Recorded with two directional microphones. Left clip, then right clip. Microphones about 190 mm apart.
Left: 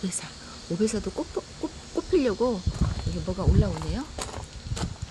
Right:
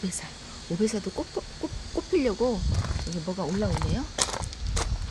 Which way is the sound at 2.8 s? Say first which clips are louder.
Left 2 dB; 25° right (ahead or behind).